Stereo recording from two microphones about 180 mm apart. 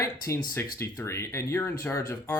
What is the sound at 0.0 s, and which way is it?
Speech, 15° left (ahead or behind).